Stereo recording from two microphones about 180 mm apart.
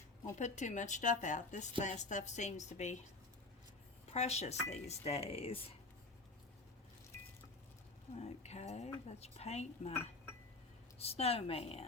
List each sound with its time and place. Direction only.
0.3 s a woman's voice: 40° left (ahead or behind)
4.1 s a woman's voice: 35° left (ahead or behind)
8.1 s a woman's voice: 35° left (ahead or behind)
11.0 s a woman's voice: 35° left (ahead or behind)